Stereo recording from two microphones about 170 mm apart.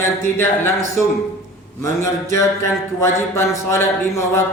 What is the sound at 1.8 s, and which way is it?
A man's voice, 15° left (ahead or behind).